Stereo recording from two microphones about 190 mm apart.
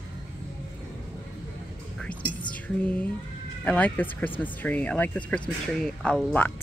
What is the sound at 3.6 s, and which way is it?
Speech, 10° left (ahead or behind).